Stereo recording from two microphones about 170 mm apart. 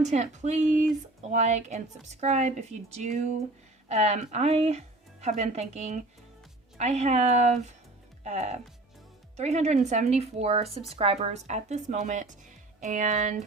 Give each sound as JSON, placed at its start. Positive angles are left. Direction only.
{"t": 0.0, "sound": "a woman's voice", "side_deg": -45}